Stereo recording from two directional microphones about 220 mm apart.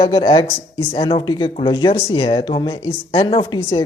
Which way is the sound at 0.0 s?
20° left (ahead or behind).